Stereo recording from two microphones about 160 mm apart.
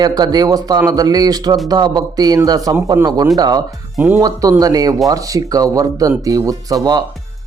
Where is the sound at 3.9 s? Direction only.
10° right (ahead or behind).